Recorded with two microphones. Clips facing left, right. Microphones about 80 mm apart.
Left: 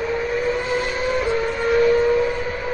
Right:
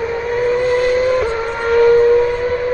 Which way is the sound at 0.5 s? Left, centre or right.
Right.